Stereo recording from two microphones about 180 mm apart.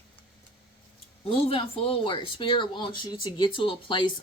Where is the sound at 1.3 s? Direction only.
30° left (ahead or behind).